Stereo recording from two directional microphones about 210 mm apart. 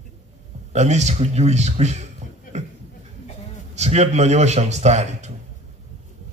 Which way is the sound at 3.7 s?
30° right (ahead or behind).